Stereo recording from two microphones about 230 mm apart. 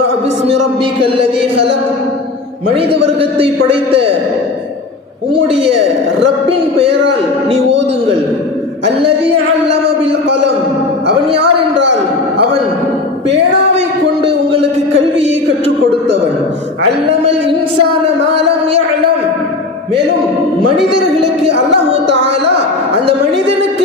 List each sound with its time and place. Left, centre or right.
2.7 s a man's voice: right
11.0 s speech: right
13.7 s a sound: right